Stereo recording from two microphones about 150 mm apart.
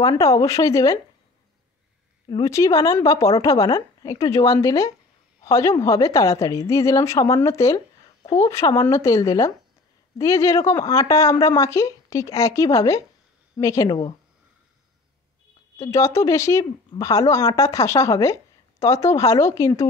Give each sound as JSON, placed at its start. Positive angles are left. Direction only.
{"t": 0.1, "sound": "speech", "side_deg": 20}
{"t": 2.2, "sound": "speech", "side_deg": 30}
{"t": 15.8, "sound": "speech", "side_deg": 20}